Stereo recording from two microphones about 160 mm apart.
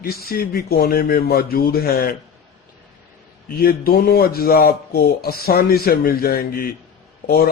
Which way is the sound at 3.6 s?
70° left (ahead or behind).